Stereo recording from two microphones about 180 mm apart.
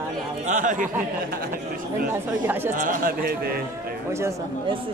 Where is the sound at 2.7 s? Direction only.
50° right (ahead or behind).